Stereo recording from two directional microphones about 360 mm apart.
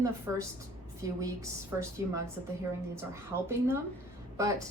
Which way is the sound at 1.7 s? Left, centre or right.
Centre.